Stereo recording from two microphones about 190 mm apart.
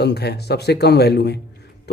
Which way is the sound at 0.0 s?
60° left (ahead or behind).